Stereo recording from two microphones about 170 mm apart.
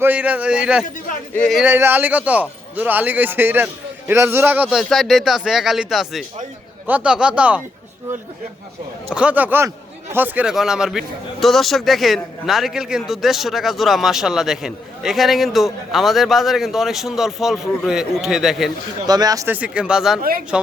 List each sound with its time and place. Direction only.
0.0 s a man's voice: 10° right (ahead or behind)
1.6 s a man's voice: 10° right (ahead or behind)
9.0 s a man's voice: 5° right (ahead or behind)
19.0 s speech: 20° right (ahead or behind)
19.5 s a man's voice: 5° right (ahead or behind)